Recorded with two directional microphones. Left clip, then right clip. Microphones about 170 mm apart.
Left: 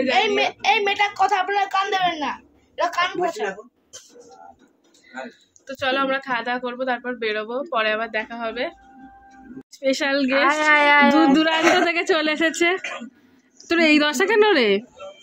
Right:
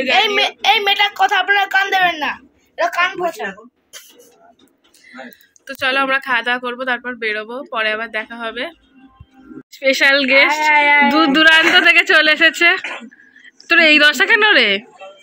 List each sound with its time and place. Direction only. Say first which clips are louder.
0.1 s a woman's voice: right 7 dB; centre (ahead or behind)
2.7 s a woman's voice: right 5 dB; 30° right (ahead or behind)
5.7 s speech: right 5 dB; 5° right (ahead or behind)
10.5 s speech: right 3 dB; 65° left (ahead or behind)
11.1 s a woman's voice: right 6 dB; 5° left (ahead or behind)